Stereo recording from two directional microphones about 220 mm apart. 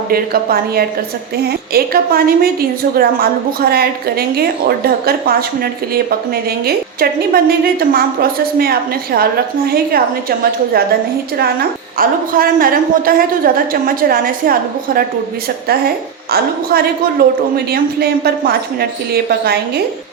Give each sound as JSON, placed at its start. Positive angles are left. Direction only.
{"t": 0.1, "sound": "a woman's voice", "side_deg": -45}
{"t": 11.9, "sound": "a woman's voice", "side_deg": -40}
{"t": 16.3, "sound": "a woman's voice", "side_deg": -45}